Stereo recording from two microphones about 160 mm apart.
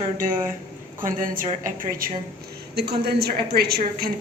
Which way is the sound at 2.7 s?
90° right.